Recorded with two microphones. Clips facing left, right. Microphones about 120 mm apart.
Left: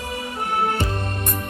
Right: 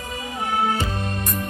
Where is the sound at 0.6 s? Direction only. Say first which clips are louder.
Even; 55° left (ahead or behind).